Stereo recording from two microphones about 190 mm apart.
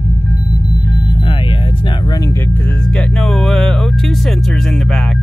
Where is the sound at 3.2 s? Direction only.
5° left (ahead or behind).